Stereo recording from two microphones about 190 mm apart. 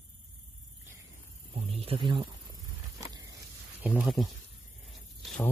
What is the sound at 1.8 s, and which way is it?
Speech, 25° right (ahead or behind).